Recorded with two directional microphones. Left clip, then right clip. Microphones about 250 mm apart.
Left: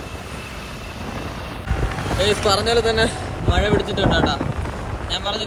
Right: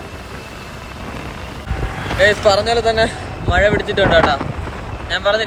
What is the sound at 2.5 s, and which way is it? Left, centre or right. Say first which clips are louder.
Speech: right 4 dB; right.